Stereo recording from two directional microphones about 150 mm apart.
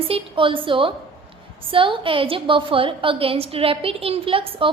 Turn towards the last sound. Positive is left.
turn(degrees=-35)  # may be behind; listen again after turning